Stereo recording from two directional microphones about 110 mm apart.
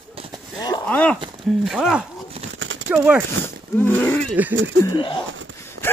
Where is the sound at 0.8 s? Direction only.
15° left (ahead or behind).